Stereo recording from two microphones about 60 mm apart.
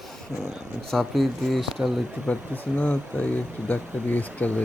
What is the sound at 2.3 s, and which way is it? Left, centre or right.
Speech, left.